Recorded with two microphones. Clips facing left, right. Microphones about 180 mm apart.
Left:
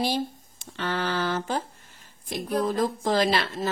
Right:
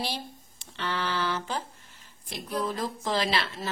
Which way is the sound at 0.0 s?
45° left (ahead or behind).